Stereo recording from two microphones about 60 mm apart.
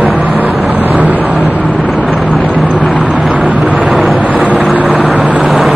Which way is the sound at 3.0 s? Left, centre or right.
Centre.